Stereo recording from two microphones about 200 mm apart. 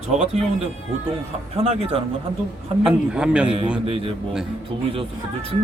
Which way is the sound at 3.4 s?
25° right (ahead or behind).